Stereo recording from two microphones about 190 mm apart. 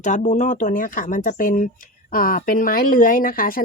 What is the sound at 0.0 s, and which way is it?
Speech, 40° left (ahead or behind).